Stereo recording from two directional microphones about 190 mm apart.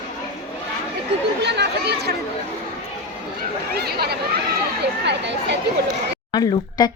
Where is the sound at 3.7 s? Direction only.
55° right (ahead or behind).